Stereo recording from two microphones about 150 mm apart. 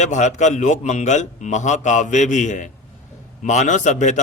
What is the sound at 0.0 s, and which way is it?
A man's voice, 50° left (ahead or behind).